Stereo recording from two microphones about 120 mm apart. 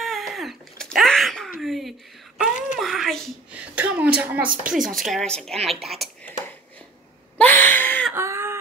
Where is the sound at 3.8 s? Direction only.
15° right (ahead or behind).